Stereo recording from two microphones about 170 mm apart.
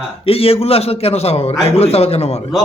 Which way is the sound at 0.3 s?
35° left (ahead or behind).